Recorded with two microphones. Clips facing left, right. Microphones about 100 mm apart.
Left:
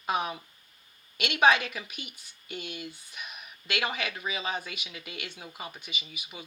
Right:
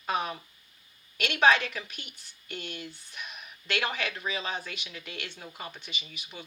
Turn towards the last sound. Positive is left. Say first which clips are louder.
# left 1 dB
turn(degrees=5)  # may be behind; listen again after turning